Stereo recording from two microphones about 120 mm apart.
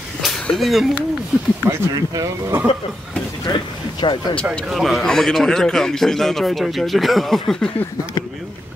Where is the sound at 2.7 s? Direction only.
50° left (ahead or behind).